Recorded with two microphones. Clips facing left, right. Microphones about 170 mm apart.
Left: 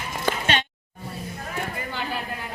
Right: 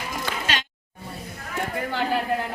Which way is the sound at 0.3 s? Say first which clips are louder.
Left 8 dB; 45° left (ahead or behind).